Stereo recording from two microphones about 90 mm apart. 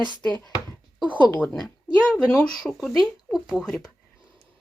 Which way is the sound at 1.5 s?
Centre (ahead or behind).